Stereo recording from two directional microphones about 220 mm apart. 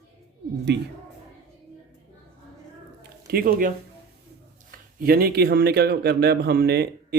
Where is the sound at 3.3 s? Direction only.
45° right (ahead or behind).